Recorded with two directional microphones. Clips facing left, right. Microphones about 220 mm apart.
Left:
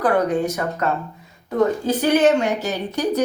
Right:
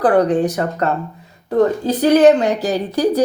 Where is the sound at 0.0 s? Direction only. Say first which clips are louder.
Right 5 dB; 35° right (ahead or behind).